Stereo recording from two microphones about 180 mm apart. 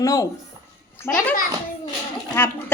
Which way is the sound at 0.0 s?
20° left (ahead or behind).